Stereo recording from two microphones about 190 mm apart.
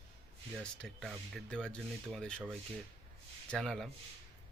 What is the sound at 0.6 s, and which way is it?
Speech, 5° left (ahead or behind).